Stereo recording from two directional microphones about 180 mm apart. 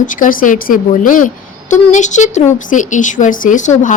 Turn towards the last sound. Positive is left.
turn(degrees=45)  # may be behind; listen again after turning